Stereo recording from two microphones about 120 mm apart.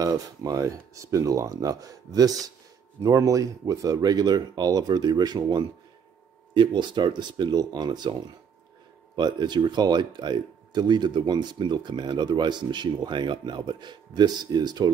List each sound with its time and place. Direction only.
0.0 s speech: 30° right (ahead or behind)
9.1 s speech: 40° right (ahead or behind)